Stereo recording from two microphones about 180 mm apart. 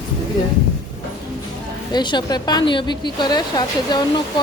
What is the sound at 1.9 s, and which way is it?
A woman's voice, 25° left (ahead or behind).